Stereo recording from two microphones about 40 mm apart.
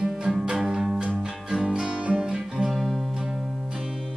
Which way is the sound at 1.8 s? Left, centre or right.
Right.